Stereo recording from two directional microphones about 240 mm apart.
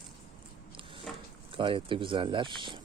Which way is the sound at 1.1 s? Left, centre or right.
Centre.